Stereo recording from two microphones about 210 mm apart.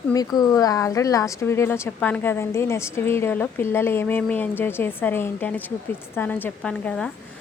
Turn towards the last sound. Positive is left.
turn(degrees=5)  # may be behind; listen again after turning